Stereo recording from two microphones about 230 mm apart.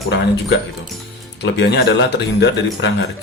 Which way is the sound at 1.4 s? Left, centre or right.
Left.